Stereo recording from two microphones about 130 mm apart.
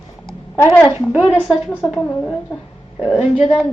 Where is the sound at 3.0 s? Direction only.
5° right (ahead or behind).